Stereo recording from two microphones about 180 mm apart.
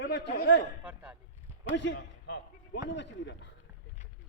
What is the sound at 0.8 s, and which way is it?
Speech, 10° right (ahead or behind).